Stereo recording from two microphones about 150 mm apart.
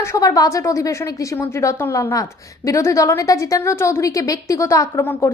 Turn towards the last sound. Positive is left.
turn(degrees=15)  # may be behind; listen again after turning